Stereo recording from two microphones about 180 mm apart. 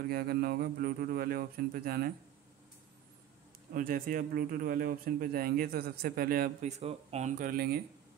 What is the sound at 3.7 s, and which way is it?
Speech, 50° right (ahead or behind).